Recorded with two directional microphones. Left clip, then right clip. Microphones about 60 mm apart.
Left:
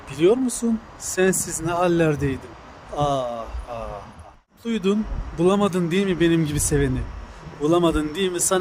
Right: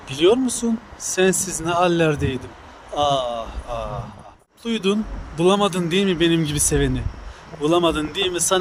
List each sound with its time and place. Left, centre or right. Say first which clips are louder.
0.1 s speech: right 2 dB; left
5.4 s speech: right 2 dB; left
7.6 s speech: right 1 dB; left